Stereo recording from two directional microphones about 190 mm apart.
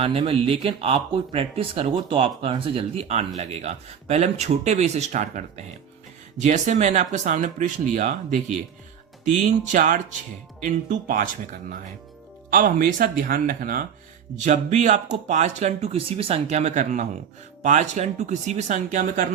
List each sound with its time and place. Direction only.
0.0 s speech: 30° right (ahead or behind)
12.5 s speech: 45° right (ahead or behind)